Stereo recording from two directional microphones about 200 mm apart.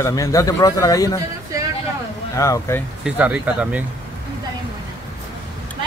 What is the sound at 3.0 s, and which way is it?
Speech, 5° right (ahead or behind).